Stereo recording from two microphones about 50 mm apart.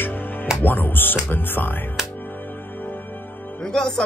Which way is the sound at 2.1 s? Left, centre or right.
Left.